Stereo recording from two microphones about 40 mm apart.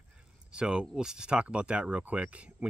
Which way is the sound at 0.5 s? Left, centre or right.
Right.